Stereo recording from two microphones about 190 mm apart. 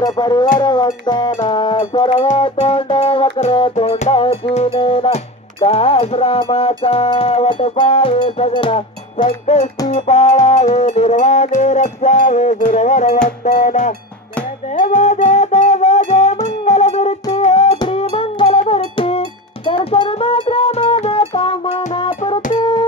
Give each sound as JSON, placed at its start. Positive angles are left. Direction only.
{"t": 0.0, "sound": "music", "side_deg": 20}